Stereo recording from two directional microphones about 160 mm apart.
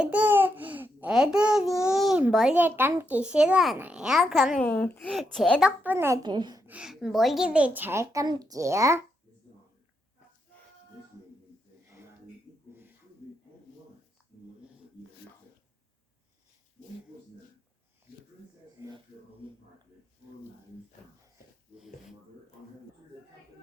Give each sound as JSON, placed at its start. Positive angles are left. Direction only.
{"t": 0.0, "sound": "babbling", "side_deg": -10}
{"t": 1.8, "sound": "a child's voice", "side_deg": -5}
{"t": 4.6, "sound": "a child's voice", "side_deg": 10}
{"t": 6.2, "sound": "a child's voice", "side_deg": -30}
{"t": 6.7, "sound": "speech", "side_deg": -5}
{"t": 18.8, "sound": "a sound", "side_deg": -15}
{"t": 19.4, "sound": "a sound", "side_deg": -35}